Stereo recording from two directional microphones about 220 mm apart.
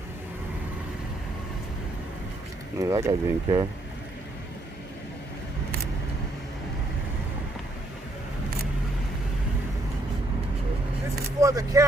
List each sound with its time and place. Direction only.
2.7 s speech: 15° right (ahead or behind)
11.3 s speech: 15° right (ahead or behind)